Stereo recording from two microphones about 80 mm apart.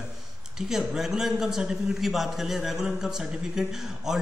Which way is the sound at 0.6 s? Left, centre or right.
Centre.